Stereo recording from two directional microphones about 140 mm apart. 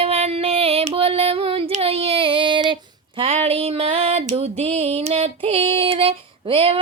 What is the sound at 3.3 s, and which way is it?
Female singing, 45° right (ahead or behind).